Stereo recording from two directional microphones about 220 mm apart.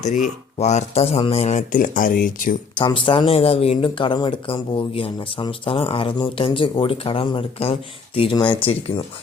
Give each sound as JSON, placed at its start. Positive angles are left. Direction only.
{"t": 0.6, "sound": "speech", "side_deg": 30}
{"t": 2.7, "sound": "speech", "side_deg": 20}